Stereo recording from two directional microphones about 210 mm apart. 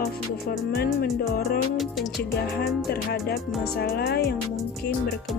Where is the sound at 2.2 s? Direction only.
50° left (ahead or behind).